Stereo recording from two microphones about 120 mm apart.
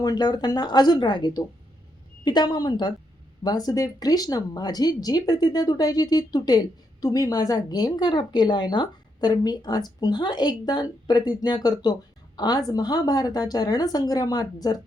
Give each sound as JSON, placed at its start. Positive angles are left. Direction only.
{"t": 0.0, "sound": "speech", "side_deg": 35}